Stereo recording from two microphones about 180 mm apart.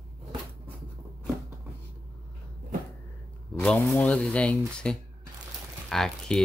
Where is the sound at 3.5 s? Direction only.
5° left (ahead or behind).